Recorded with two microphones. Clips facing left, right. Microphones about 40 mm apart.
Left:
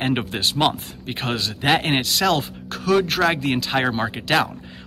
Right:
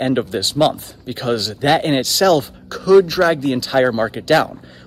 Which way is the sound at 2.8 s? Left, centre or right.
Left.